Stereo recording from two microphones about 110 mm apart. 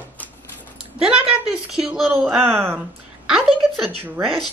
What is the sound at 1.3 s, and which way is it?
Speech, 5° right (ahead or behind).